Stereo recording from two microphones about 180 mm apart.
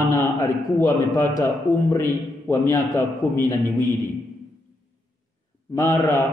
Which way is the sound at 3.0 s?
45° left (ahead or behind).